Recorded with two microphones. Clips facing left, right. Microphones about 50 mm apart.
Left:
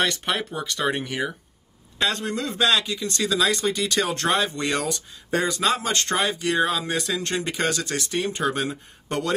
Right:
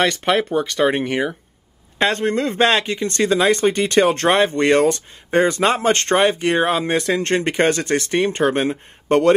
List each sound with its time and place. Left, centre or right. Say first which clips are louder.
0.0 s speech: right 7 dB; right